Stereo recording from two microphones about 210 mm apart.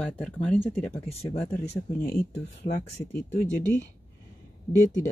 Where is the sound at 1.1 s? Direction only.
30° left (ahead or behind).